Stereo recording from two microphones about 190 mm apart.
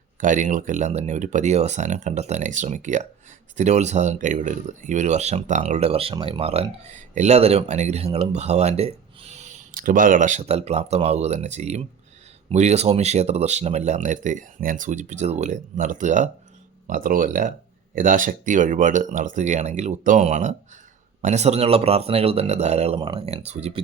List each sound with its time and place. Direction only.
0.2 s speech: 40° right (ahead or behind)